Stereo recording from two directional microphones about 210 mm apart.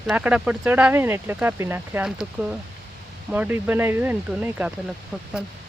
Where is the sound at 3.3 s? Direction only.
10° right (ahead or behind).